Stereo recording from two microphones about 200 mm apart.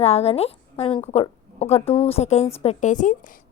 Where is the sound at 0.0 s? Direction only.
30° left (ahead or behind).